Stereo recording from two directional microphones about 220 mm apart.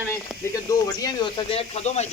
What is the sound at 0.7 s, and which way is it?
Speech, 20° left (ahead or behind).